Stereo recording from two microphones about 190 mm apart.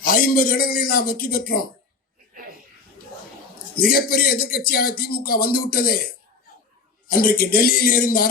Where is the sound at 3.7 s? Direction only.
50° left (ahead or behind).